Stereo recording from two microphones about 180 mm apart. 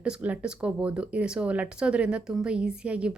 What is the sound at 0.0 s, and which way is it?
Speech, 5° right (ahead or behind).